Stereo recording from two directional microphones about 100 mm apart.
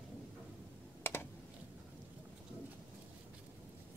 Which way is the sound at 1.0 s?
20° left (ahead or behind).